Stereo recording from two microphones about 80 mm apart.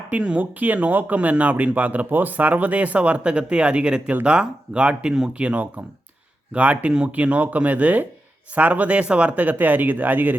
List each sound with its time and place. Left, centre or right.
0.1 s speech: centre